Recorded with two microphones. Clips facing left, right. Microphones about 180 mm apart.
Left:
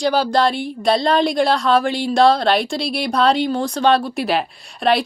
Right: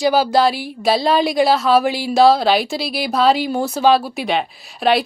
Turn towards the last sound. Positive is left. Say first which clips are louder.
# right 1 dB
turn(degrees=0)  # may be behind; listen again after turning